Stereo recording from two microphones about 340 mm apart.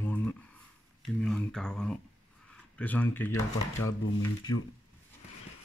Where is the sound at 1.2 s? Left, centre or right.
Centre.